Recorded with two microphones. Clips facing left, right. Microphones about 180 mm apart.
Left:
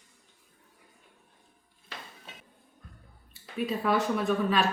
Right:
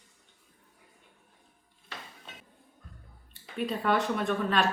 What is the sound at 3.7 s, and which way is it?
Speech, 5° left (ahead or behind).